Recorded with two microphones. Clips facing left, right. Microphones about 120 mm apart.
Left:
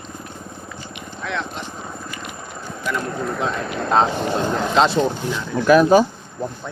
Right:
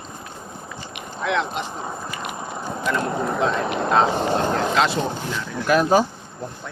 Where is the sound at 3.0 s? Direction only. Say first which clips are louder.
Right 2 dB; 20° right (ahead or behind).